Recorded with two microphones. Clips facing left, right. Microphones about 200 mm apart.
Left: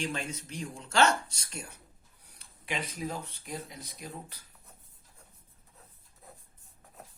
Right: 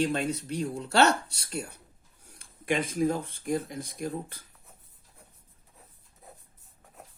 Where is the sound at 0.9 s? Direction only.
35° right (ahead or behind).